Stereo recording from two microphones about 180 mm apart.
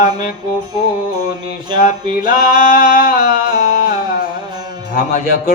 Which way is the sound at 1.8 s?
50° left (ahead or behind).